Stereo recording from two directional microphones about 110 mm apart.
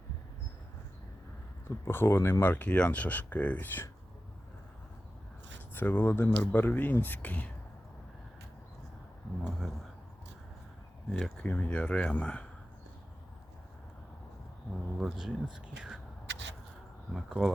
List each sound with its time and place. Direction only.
1.6 s speech: 20° left (ahead or behind)
5.7 s speech: 20° left (ahead or behind)
9.4 s speech: 5° right (ahead or behind)
11.1 s speech: 10° left (ahead or behind)
14.7 s speech: centre (ahead or behind)
17.1 s speech: centre (ahead or behind)